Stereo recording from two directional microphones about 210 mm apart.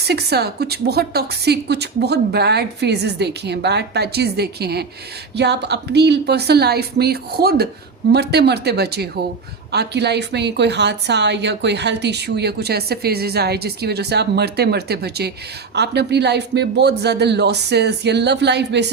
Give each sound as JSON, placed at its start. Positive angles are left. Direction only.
{"t": 0.0, "sound": "a woman's voice", "side_deg": -50}